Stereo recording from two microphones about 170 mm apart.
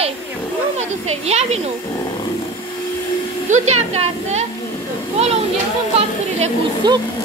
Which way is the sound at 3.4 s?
45° right (ahead or behind).